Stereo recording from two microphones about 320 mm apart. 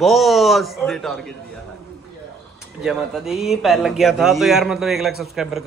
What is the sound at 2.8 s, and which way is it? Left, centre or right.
Speech, centre.